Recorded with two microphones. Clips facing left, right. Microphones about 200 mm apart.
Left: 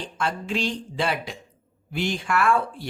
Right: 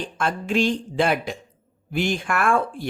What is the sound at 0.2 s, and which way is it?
Speech, 50° right (ahead or behind).